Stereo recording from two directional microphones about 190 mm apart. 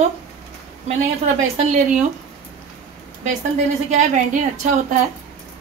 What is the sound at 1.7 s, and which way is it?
Speech, 40° right (ahead or behind).